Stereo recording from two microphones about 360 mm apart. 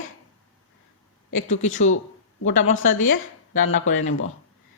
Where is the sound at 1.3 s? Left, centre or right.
Left.